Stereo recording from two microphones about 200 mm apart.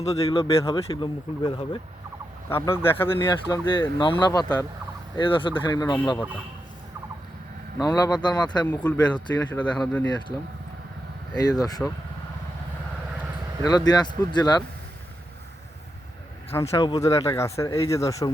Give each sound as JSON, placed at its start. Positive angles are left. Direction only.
{"t": 0.0, "sound": "speech", "side_deg": 30}
{"t": 2.5, "sound": "speech", "side_deg": 10}
{"t": 7.8, "sound": "speech", "side_deg": 20}
{"t": 8.6, "sound": "speech", "side_deg": 10}
{"t": 11.3, "sound": "speech", "side_deg": 20}
{"t": 13.6, "sound": "speech", "side_deg": 20}
{"t": 16.5, "sound": "speech", "side_deg": 15}